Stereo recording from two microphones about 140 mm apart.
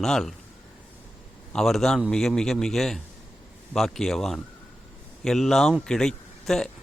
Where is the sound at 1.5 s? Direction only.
Centre (ahead or behind).